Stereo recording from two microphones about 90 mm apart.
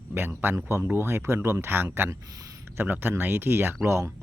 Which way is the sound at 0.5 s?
35° right (ahead or behind).